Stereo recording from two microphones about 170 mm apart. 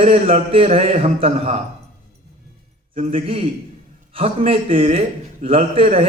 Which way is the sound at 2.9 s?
35° right (ahead or behind).